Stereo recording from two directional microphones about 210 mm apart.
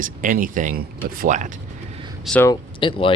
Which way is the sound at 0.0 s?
40° right (ahead or behind).